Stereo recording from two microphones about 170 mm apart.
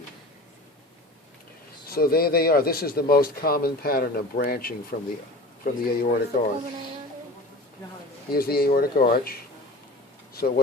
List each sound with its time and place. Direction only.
1.9 s speech: 60° left (ahead or behind)
8.3 s speech: 65° left (ahead or behind)